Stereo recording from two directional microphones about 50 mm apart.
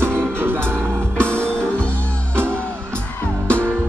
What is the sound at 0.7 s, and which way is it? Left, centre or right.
Music, centre.